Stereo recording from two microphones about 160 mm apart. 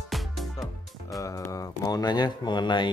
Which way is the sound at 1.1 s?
20° left (ahead or behind).